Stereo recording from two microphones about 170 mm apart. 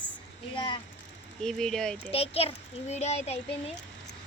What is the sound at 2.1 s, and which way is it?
A child's voice, 35° left (ahead or behind).